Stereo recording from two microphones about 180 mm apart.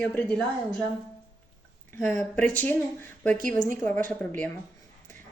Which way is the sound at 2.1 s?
10° left (ahead or behind).